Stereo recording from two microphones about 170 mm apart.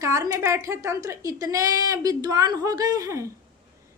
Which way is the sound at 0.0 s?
20° right (ahead or behind).